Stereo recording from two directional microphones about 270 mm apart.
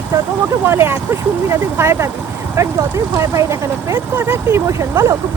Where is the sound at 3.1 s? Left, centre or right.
Centre.